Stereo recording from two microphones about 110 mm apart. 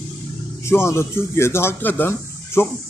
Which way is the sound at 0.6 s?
25° left (ahead or behind).